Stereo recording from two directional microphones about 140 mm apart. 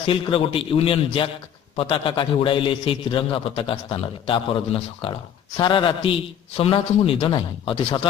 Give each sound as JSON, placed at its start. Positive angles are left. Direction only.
{"t": 0.0, "sound": "a man's voice", "side_deg": 40}